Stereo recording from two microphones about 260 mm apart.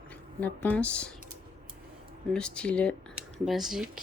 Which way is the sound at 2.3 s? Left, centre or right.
Centre.